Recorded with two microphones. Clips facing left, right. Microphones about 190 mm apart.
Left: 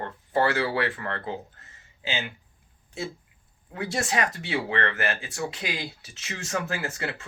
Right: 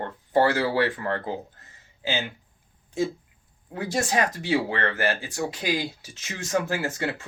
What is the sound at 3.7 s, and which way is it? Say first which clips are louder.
Speech: right 2 dB; 40° right (ahead or behind).